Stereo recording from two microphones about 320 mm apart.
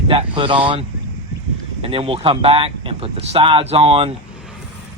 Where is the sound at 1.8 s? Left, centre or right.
Centre.